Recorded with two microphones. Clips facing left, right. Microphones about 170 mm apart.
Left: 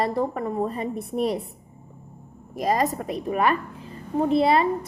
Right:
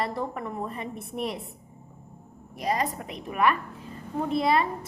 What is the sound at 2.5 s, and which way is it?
A woman's voice, 45° left (ahead or behind).